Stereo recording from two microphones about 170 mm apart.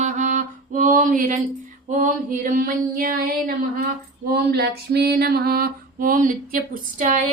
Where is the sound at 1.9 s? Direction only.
50° right (ahead or behind).